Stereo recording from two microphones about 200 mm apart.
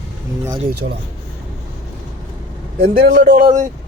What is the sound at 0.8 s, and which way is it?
Speech, 50° right (ahead or behind).